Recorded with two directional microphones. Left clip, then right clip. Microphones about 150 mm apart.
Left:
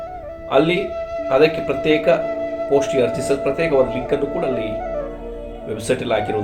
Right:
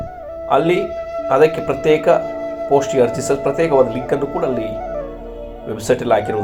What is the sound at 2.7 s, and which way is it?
Speech, 15° right (ahead or behind).